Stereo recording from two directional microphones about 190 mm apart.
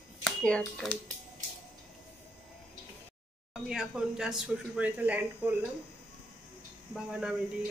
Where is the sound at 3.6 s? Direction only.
5° right (ahead or behind).